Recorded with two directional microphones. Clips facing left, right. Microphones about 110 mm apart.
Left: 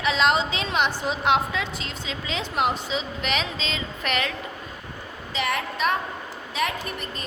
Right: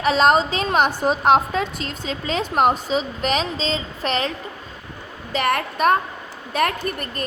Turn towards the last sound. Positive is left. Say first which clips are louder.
# right 5 dB
turn(degrees=-50)  # may be behind; listen again after turning